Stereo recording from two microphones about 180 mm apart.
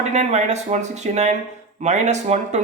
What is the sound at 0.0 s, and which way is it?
A man's voice, 40° right (ahead or behind).